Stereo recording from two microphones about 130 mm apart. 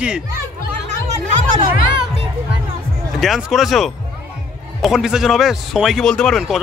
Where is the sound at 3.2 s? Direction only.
Centre (ahead or behind).